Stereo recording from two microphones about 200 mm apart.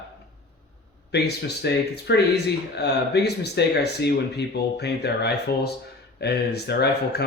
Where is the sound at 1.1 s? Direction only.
55° left (ahead or behind).